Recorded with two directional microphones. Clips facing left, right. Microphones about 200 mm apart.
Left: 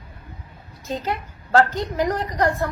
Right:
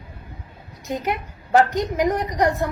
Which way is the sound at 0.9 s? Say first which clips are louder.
Right 1 dB; 20° right (ahead or behind).